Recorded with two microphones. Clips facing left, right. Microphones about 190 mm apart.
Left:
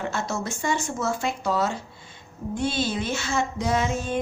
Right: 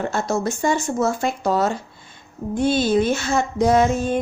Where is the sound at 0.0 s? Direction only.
40° right (ahead or behind).